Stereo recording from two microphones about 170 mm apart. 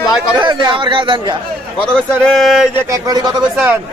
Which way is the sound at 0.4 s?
25° right (ahead or behind).